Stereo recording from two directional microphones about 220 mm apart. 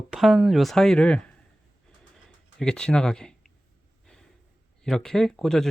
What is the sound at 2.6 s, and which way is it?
Speech, 5° left (ahead or behind).